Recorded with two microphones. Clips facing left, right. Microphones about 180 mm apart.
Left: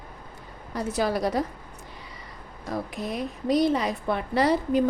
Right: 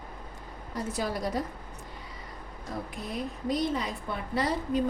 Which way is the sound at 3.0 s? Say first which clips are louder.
Left 4 dB; 80° left.